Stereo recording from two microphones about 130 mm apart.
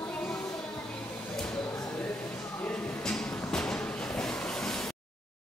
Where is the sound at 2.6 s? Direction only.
10° left (ahead or behind).